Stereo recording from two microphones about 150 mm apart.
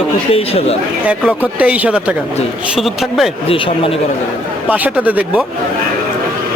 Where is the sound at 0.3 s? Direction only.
40° left (ahead or behind).